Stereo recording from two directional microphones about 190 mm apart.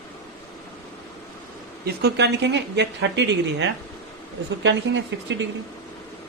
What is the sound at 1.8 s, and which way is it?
Speech, 60° right (ahead or behind).